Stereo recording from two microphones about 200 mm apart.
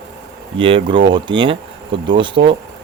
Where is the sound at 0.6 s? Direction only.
25° right (ahead or behind).